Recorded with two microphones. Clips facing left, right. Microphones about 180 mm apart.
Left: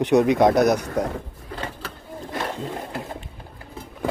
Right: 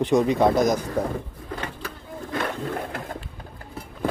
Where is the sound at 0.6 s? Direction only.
70° left (ahead or behind).